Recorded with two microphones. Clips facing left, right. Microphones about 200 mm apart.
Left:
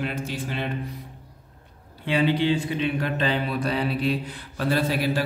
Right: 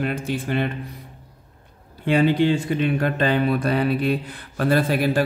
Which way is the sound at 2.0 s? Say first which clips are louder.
Right 4 dB; 50° right (ahead or behind).